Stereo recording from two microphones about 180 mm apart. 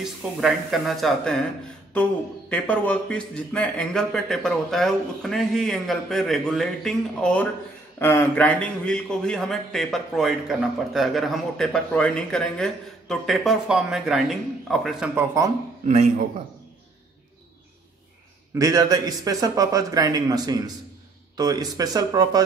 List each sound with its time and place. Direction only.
0.0 s a man's voice: centre (ahead or behind)
2.5 s a man's voice: 10° left (ahead or behind)
15.1 s speech: 15° right (ahead or behind)
18.5 s a man's voice: 20° right (ahead or behind)